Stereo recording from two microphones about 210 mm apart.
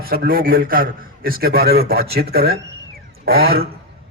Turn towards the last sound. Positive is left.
turn(degrees=-45)  # may be behind; listen again after turning